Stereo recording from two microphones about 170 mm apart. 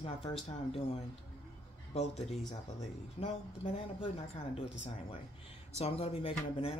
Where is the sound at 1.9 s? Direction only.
35° left (ahead or behind).